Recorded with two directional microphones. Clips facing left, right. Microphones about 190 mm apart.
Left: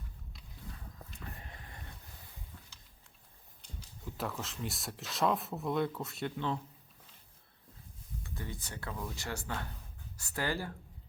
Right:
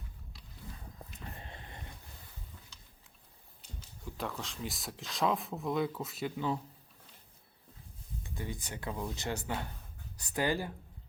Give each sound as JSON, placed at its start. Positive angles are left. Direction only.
{"t": 1.4, "sound": "a sound", "side_deg": -25}
{"t": 3.8, "sound": "speech", "side_deg": 0}
{"t": 8.2, "sound": "speech", "side_deg": -15}